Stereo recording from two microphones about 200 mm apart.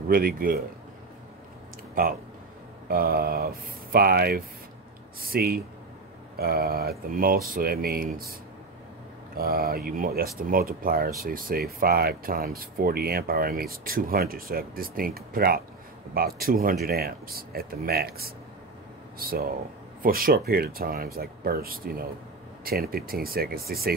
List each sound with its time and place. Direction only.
0.1 s speech: 45° right (ahead or behind)
2.0 s speech: 45° right (ahead or behind)
9.4 s speech: 45° right (ahead or behind)